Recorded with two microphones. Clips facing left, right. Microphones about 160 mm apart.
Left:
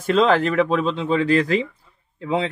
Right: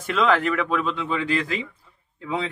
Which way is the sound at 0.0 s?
35° left (ahead or behind).